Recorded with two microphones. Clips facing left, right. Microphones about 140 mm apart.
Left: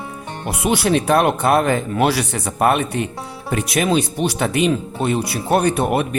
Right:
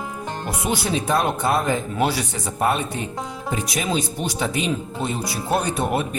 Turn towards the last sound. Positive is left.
turn(degrees=65)  # may be behind; listen again after turning